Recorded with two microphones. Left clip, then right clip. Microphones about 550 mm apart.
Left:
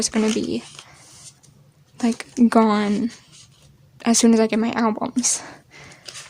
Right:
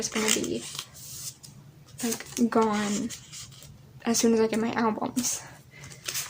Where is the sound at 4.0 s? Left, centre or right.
Left.